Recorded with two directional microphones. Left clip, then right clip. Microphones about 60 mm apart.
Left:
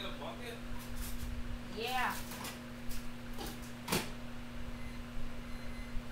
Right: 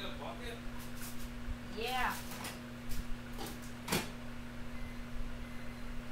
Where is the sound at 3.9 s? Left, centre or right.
Right.